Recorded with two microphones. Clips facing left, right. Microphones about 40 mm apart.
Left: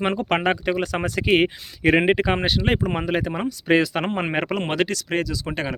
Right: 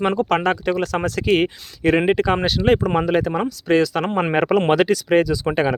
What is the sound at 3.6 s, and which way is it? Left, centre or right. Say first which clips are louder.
Speech: right 1 dB; left.